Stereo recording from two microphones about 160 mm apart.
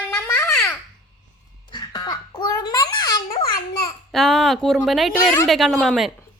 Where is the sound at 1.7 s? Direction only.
25° left (ahead or behind).